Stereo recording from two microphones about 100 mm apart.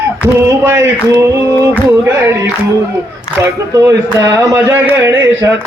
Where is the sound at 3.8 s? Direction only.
30° right (ahead or behind).